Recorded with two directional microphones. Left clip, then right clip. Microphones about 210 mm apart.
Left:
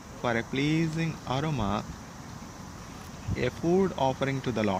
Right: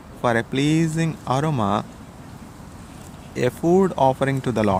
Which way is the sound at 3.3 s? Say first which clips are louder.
Right 8 dB; 30° right (ahead or behind).